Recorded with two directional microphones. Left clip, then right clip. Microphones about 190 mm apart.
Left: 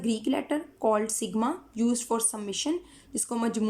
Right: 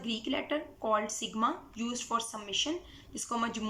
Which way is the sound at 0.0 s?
30° left (ahead or behind).